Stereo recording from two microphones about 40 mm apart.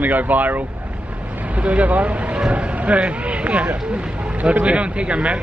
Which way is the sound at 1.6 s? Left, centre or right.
Right.